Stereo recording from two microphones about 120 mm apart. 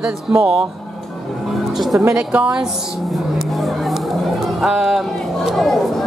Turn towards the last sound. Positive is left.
turn(degrees=0)  # may be behind; listen again after turning